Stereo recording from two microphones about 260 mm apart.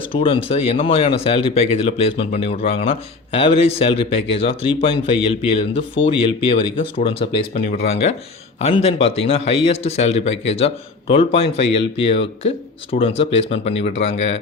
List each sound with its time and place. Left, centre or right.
0.1 s speech: left